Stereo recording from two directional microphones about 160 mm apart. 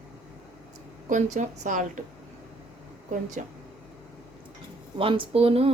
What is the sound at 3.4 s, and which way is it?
Speech, 50° right (ahead or behind).